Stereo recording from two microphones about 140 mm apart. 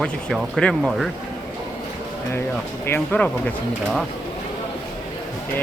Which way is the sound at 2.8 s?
15° left (ahead or behind).